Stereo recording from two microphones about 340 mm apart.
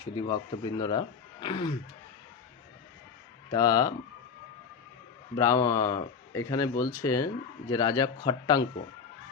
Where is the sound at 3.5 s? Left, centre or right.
Centre.